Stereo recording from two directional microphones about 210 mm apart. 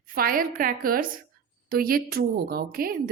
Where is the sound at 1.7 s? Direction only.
45° right (ahead or behind).